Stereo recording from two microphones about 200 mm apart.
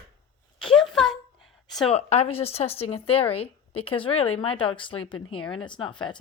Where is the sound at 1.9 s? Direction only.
30° left (ahead or behind).